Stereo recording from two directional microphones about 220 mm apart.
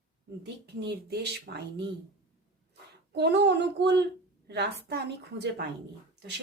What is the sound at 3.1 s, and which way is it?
A woman's voice, 50° right (ahead or behind).